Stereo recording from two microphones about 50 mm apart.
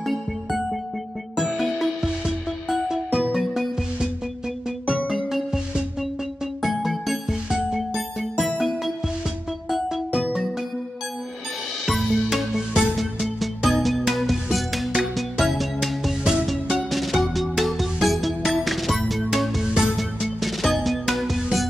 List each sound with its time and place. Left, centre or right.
0.0 s music: centre
2.0 s music: centre
4.9 s music: centre
6.6 s music: centre
10.1 s music: centre
11.8 s music: centre